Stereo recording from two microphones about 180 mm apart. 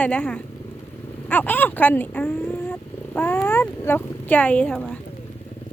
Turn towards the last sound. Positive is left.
turn(degrees=5)  # may be behind; listen again after turning